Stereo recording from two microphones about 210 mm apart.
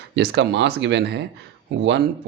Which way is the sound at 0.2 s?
55° right (ahead or behind).